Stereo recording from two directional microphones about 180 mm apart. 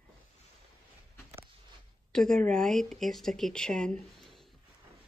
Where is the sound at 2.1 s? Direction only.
5° left (ahead or behind).